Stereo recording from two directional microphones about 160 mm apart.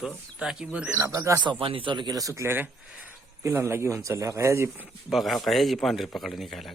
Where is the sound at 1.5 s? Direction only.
35° right (ahead or behind); by 4.9 s 15° right (ahead or behind).